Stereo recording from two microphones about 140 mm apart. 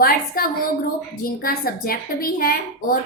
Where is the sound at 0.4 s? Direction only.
90° left.